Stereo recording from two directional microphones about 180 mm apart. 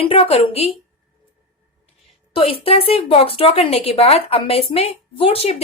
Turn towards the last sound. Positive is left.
turn(degrees=35)  # may be behind; listen again after turning